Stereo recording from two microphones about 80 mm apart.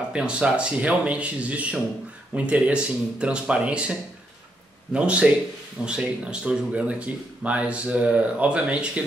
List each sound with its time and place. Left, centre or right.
0.1 s speech: centre
4.9 s speech: centre